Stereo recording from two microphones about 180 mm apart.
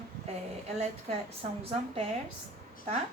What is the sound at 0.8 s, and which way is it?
A woman's voice, 35° right (ahead or behind).